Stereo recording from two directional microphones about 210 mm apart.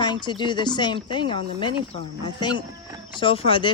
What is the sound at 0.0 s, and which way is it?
Speech, 20° left (ahead or behind).